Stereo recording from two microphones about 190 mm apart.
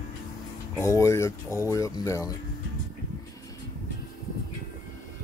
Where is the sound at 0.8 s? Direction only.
15° left (ahead or behind).